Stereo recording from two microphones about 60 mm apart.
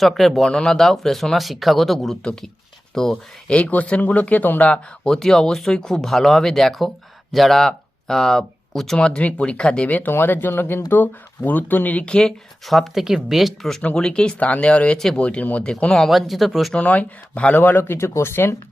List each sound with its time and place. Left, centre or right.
0.0 s speech: centre; by 4.7 s left
4.7 s speech: centre
9.0 s speech: centre
10.1 s speech: left
12.0 s speech: centre
12.6 s speech: centre
13.8 s speech: centre
14.9 s speech: centre
15.2 s speech: left
15.6 s speech: centre
16.8 s speech: left